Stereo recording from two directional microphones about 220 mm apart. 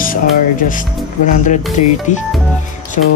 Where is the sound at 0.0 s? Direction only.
40° left (ahead or behind).